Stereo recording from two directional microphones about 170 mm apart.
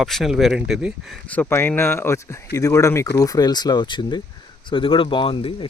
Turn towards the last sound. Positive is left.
turn(degrees=30)  # may be behind; listen again after turning